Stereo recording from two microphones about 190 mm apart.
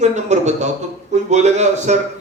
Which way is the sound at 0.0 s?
35° right (ahead or behind).